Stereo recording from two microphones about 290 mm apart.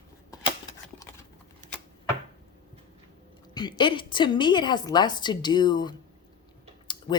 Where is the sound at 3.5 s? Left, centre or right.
Centre.